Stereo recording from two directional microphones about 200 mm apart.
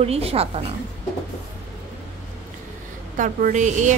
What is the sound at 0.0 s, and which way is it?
Speech, 30° right (ahead or behind).